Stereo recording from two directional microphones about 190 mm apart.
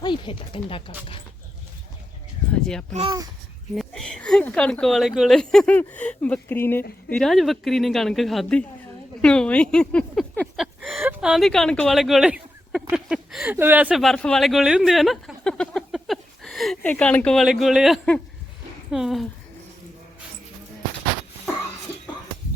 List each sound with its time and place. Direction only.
0.0 s speech: 25° left (ahead or behind)
2.9 s a child's voice: 30° right (ahead or behind)
3.8 s speech: centre (ahead or behind)